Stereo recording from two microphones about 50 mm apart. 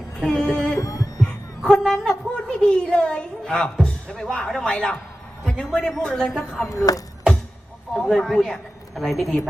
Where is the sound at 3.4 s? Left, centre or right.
Centre.